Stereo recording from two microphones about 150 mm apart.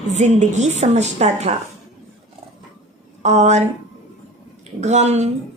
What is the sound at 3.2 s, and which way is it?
Speech, 50° right (ahead or behind).